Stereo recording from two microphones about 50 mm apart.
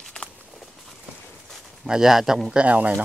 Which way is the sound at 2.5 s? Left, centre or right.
Right.